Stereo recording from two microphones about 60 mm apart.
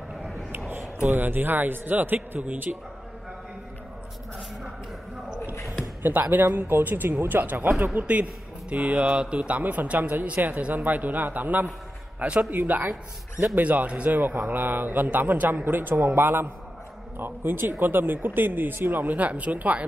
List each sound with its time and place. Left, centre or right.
1.0 s a man's voice: right
5.4 s a sound: left
6.3 s a man's voice: right
12.2 s a man's voice: centre
12.4 s a man's voice: right